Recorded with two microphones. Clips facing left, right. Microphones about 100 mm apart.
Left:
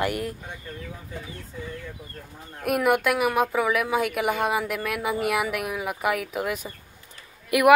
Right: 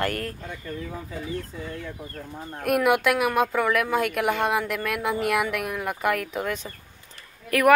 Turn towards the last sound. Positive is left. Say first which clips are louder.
# left 1 dB
turn(degrees=15)  # may be behind; listen again after turning